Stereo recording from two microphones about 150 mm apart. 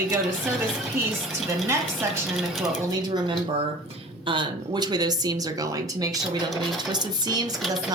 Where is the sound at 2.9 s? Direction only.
30° right (ahead or behind).